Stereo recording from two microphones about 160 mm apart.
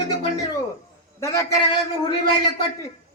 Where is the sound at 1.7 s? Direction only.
30° left (ahead or behind).